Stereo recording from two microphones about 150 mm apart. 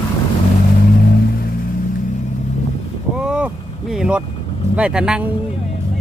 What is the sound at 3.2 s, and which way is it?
Vehicle, 5° right (ahead or behind).